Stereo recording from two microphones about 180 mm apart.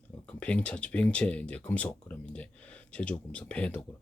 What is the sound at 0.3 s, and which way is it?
Speech, 5° left (ahead or behind).